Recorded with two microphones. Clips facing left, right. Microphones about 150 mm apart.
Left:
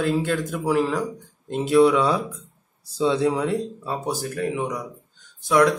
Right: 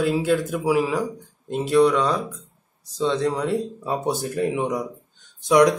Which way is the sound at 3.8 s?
20° right (ahead or behind).